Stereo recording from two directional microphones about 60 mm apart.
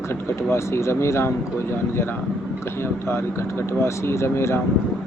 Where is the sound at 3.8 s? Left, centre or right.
Left.